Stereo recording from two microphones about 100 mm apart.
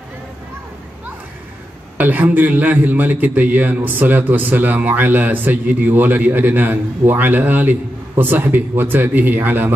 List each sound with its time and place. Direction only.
2.0 s a man's voice: 15° right (ahead or behind)